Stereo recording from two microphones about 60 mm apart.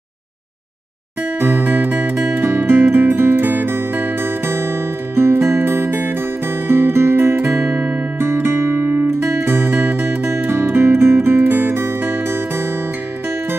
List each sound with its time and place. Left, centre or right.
1.4 s music: right